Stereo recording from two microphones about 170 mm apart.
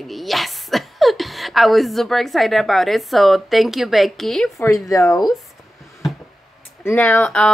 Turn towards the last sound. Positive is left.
turn(degrees=10)  # may be behind; listen again after turning